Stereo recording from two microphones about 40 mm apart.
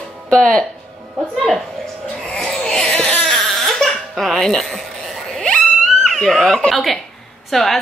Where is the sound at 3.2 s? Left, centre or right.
Centre.